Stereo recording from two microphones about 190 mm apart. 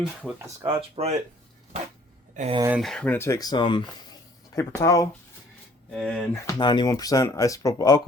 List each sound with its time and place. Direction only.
0.0 s speech: 5° right (ahead or behind)
0.7 s speech: 30° right (ahead or behind)
2.3 s speech: 35° right (ahead or behind)
2.6 s speech: 10° right (ahead or behind)
2.8 s speech: 5° left (ahead or behind)
5.9 s speech: centre (ahead or behind)
6.3 s speech: 20° left (ahead or behind)